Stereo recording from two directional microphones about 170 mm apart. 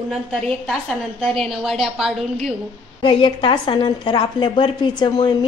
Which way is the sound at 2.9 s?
30° left (ahead or behind).